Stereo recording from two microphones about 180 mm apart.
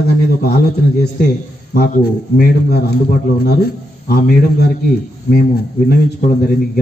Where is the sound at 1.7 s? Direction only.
55° left (ahead or behind).